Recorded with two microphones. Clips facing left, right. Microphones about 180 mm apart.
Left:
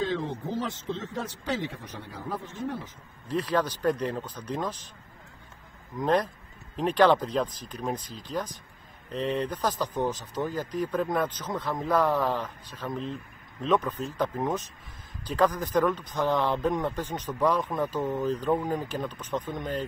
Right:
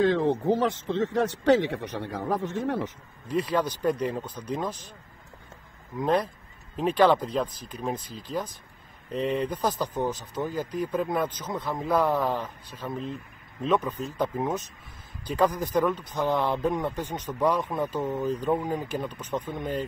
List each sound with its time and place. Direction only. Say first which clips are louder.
0.0 s speech: right 7 dB; 65° right (ahead or behind)
3.3 s speech: right 1 dB; 10° right (ahead or behind)
5.9 s speech: even; 10° right (ahead or behind)